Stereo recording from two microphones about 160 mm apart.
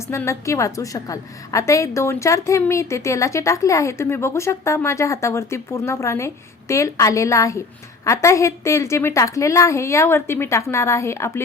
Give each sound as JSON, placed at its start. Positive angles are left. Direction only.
{"t": 0.1, "sound": "a woman's voice", "side_deg": 15}